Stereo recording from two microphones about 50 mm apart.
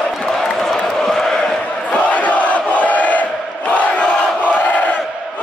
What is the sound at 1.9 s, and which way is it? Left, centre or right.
Crowd, left.